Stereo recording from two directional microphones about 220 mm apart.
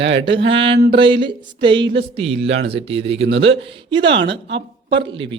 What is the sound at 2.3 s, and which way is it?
Speech, 60° right (ahead or behind).